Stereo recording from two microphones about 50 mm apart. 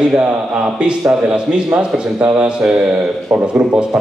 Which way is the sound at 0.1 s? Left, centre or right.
Centre.